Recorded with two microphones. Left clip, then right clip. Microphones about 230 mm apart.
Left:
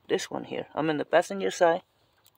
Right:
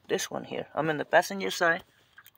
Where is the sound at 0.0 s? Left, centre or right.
Centre.